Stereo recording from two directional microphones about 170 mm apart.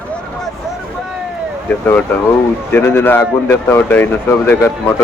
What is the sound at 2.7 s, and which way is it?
Speech, 15° left (ahead or behind).